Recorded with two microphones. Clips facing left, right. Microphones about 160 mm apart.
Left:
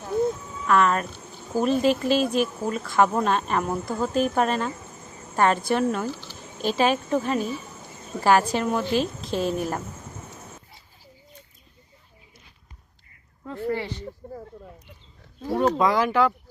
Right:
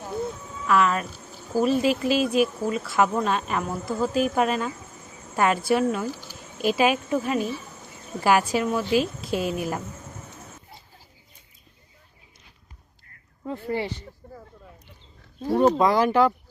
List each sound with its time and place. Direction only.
0.7 s a woman's voice: 5° right (ahead or behind)
13.4 s a woman's voice: 20° right (ahead or behind)
15.4 s a woman's voice: 15° right (ahead or behind)
15.8 s speech: 30° right (ahead or behind)